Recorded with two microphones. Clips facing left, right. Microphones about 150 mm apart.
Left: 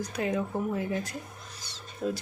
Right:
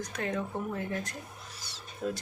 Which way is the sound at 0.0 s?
5° left (ahead or behind).